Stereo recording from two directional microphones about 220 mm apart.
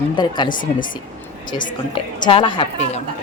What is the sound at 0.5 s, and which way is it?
Speech, 40° left (ahead or behind).